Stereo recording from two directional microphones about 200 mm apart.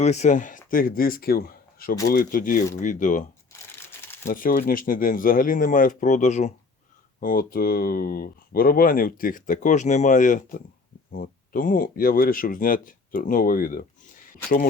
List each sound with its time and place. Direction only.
0.0 s speech: 35° left (ahead or behind)
4.3 s speech: 45° left (ahead or behind)